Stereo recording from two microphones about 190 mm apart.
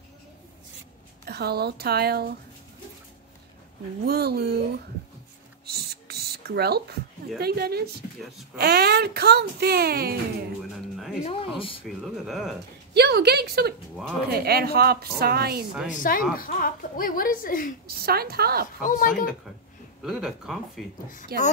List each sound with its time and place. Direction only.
1.2 s speech: 55° right (ahead or behind)
4.0 s speech: 55° right (ahead or behind)
5.7 s a sound: 55° right (ahead or behind)
8.5 s speech: 55° right (ahead or behind)
11.2 s speech: 30° left (ahead or behind)
12.0 s speech: centre (ahead or behind)
12.9 s speech: 60° right (ahead or behind)
15.9 s speech: 45° left (ahead or behind)
18.0 s speech: 55° right (ahead or behind)
18.8 s speech: 45° left (ahead or behind)
20.1 s speech: centre (ahead or behind)
21.3 s speech: 55° right (ahead or behind)